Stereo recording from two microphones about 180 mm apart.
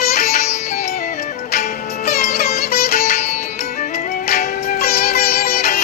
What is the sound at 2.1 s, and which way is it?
Music, 55° left (ahead or behind).